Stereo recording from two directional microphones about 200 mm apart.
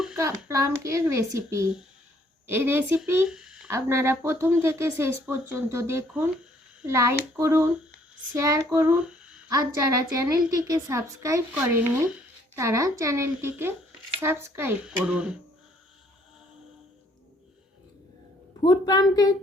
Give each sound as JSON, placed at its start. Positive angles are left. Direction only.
{"t": 0.2, "sound": "speech", "side_deg": -15}
{"t": 3.7, "sound": "speech", "side_deg": -15}
{"t": 9.5, "sound": "speech", "side_deg": -15}
{"t": 18.6, "sound": "speech", "side_deg": 20}